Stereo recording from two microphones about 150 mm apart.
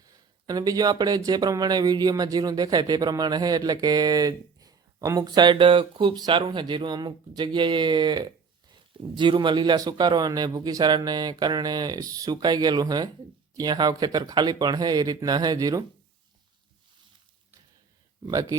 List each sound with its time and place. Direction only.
0.4 s speech: 25° right (ahead or behind)
18.3 s speech: 25° right (ahead or behind)